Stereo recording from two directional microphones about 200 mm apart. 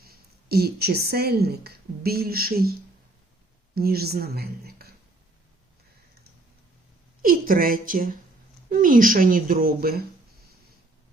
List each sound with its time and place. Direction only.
0.0 s a woman's voice: 50° right (ahead or behind)
3.8 s speech: 50° right (ahead or behind)
7.2 s speech: 45° right (ahead or behind)